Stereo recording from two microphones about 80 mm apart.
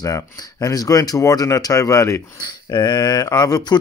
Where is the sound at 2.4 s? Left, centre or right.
Left.